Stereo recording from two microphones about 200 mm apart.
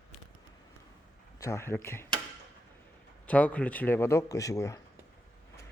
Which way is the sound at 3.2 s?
5° left (ahead or behind).